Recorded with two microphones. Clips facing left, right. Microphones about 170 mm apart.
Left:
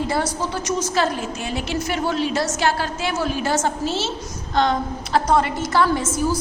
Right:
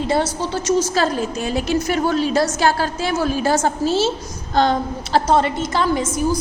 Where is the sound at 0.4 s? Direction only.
30° right (ahead or behind).